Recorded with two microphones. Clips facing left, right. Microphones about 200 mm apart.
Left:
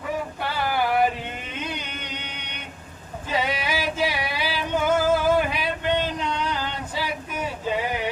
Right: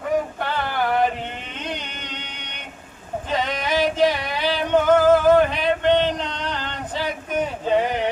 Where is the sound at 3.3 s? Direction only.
10° left (ahead or behind).